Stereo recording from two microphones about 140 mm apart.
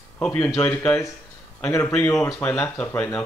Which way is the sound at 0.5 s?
10° left (ahead or behind).